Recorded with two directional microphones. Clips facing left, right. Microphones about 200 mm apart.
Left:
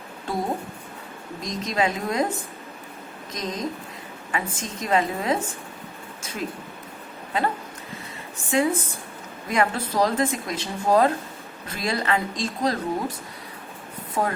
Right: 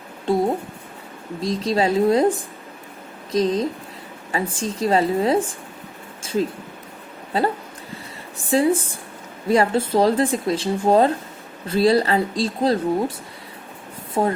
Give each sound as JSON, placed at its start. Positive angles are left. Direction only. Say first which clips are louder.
{"t": 1.4, "sound": "speech", "louder": "right 5 dB", "side_deg": -30}
{"t": 3.3, "sound": "speech", "louder": "right 10 dB", "side_deg": -30}
{"t": 6.2, "sound": "a sound", "louder": "right 13 dB", "side_deg": -30}
{"t": 7.3, "sound": "speech", "louder": "right 4 dB", "side_deg": -35}